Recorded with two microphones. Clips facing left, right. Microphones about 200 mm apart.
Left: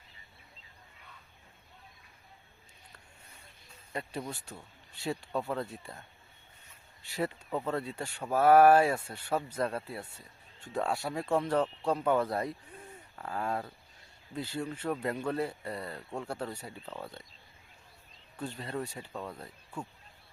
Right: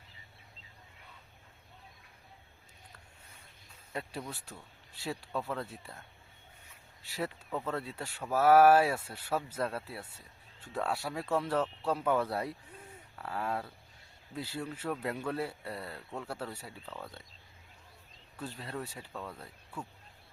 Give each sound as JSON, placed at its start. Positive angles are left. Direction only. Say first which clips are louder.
{"t": 3.9, "sound": "speech", "louder": "left 2 dB", "side_deg": 0}
{"t": 7.0, "sound": "speech", "louder": "left 3 dB", "side_deg": 0}
{"t": 16.8, "sound": "speech", "louder": "left 2 dB", "side_deg": 15}
{"t": 18.3, "sound": "speech", "louder": "left 3 dB", "side_deg": 0}
{"t": 19.1, "sound": "speech", "louder": "left 1 dB", "side_deg": 15}